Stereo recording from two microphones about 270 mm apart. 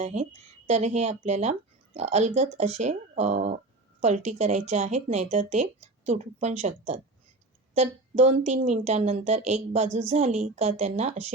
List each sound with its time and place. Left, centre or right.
0.0 s speech: right